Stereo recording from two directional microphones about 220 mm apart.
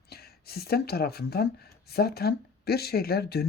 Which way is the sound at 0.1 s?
45° left (ahead or behind).